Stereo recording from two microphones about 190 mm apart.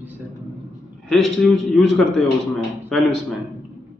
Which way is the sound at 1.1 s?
Centre (ahead or behind).